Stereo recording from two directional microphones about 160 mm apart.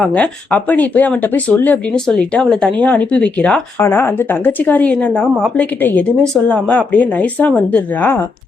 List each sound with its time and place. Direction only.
0.0 s speech: 10° left (ahead or behind)